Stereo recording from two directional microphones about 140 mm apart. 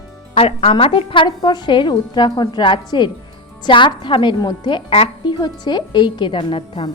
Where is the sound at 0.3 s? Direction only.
45° left (ahead or behind).